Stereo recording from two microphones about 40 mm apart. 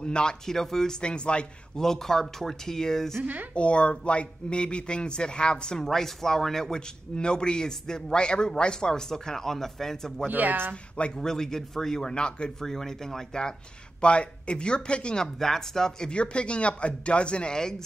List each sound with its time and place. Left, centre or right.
0.0 s a man's voice: left
1.0 s speech: left
1.8 s a man's voice: centre
3.5 s speech: left
5.9 s a man's voice: centre
10.2 s speech: right
11.1 s a man's voice: centre
12.1 s speech: left
12.5 s a man's voice: centre
14.0 s speech: left
15.2 s a man's voice: centre
16.1 s speech: left
17.6 s a man's voice: centre